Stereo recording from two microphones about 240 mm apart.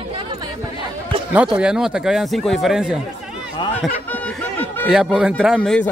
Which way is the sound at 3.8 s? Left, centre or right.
Centre.